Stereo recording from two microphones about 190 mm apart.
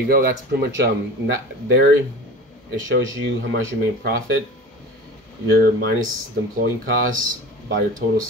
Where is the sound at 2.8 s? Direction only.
80° right.